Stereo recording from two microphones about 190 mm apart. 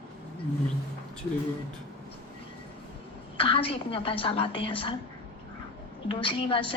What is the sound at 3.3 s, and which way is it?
A woman's voice, 30° left (ahead or behind).